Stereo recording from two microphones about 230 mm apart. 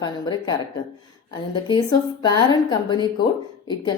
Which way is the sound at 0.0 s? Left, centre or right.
Centre.